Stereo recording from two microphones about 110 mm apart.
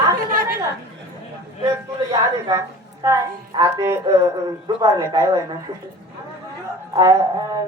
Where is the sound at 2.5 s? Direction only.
30° right (ahead or behind).